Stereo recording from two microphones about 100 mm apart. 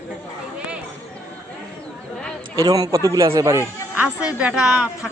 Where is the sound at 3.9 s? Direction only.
10° right (ahead or behind).